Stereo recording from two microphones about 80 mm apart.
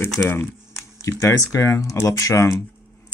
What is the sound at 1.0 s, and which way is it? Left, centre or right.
Speech, left.